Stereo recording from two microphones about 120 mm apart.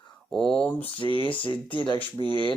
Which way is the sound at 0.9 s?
45° left (ahead or behind).